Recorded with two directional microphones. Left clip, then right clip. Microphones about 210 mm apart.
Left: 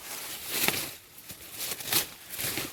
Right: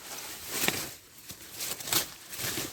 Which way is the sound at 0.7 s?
20° right (ahead or behind).